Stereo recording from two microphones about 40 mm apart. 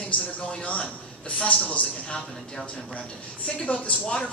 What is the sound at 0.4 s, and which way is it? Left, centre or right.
A woman's voice, left.